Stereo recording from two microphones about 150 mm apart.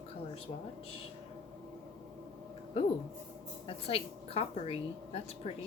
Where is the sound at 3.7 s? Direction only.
40° left (ahead or behind).